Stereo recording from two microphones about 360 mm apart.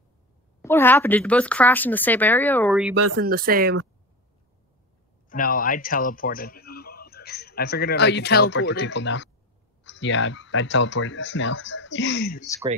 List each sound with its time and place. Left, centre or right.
0.6 s speech: centre
2.9 s speech: right
3.2 s speech: right
5.3 s speech: left